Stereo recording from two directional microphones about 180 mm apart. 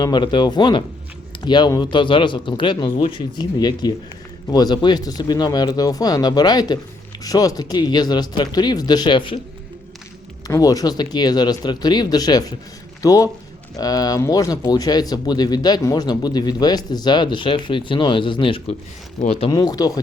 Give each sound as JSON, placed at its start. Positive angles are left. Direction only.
{"t": 0.0, "sound": "speech", "side_deg": 25}
{"t": 10.4, "sound": "speech", "side_deg": 20}
{"t": 19.5, "sound": "speech", "side_deg": 20}